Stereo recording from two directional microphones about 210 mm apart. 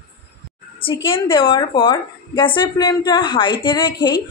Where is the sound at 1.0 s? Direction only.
25° left (ahead or behind).